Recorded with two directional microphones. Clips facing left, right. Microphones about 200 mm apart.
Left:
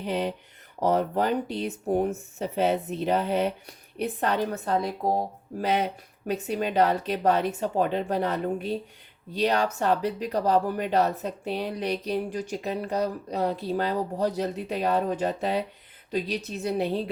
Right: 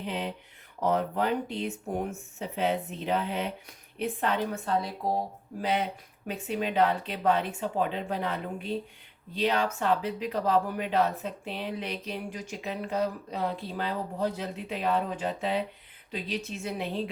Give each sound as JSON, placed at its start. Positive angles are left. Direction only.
{"t": 0.0, "sound": "speech", "side_deg": 40}
{"t": 6.5, "sound": "speech", "side_deg": 40}